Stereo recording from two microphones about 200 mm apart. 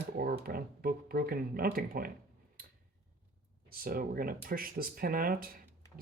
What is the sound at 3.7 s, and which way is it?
Speech, 45° right (ahead or behind).